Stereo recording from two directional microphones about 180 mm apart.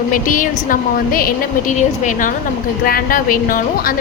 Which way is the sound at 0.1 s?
45° left (ahead or behind).